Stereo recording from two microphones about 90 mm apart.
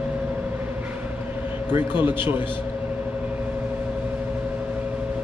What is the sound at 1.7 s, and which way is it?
Speech, 25° right (ahead or behind).